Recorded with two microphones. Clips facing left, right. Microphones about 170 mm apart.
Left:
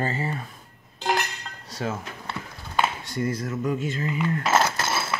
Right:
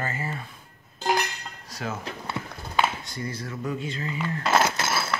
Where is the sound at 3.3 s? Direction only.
45° left (ahead or behind).